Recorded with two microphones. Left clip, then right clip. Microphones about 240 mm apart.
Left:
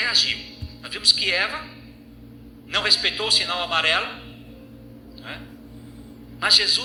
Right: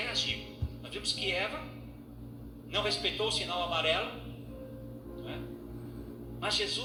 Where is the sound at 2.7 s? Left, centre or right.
Left.